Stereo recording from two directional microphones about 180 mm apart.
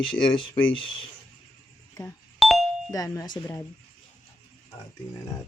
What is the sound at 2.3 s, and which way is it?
Doorbell, centre (ahead or behind).